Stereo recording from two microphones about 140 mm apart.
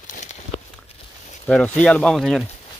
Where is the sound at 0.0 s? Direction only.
60° left (ahead or behind).